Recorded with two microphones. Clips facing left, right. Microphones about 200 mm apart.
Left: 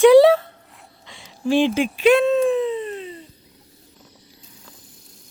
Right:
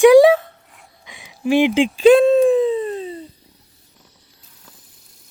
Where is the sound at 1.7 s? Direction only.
30° right (ahead or behind).